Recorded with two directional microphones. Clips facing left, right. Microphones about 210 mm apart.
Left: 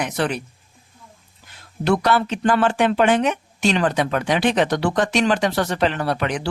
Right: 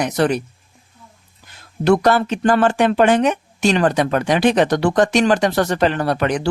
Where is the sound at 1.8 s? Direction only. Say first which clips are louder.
Right 4 dB; 45° right (ahead or behind).